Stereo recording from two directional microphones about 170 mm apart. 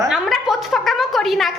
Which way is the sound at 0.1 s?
Centre (ahead or behind).